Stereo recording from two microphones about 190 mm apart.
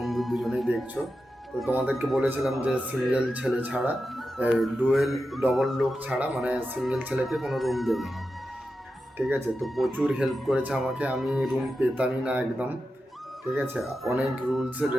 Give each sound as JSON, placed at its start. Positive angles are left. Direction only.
{"t": 0.0, "sound": "a man's voice", "side_deg": 0}
{"t": 9.1, "sound": "a man's voice", "side_deg": -5}